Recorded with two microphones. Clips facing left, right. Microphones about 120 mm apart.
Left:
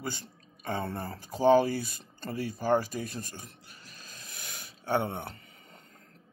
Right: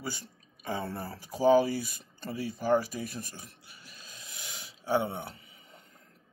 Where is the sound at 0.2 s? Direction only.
55° left (ahead or behind).